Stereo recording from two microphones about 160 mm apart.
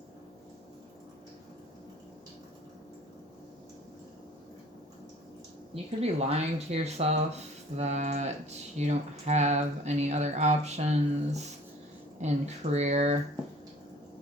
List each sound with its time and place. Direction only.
5.7 s speech: 40° right (ahead or behind)